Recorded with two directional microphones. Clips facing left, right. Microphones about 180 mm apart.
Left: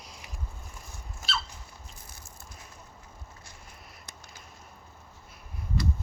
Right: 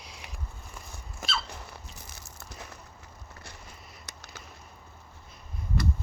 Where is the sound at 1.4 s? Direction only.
70° right (ahead or behind).